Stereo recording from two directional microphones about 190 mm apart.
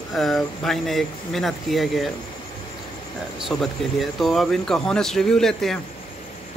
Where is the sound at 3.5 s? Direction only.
Centre (ahead or behind).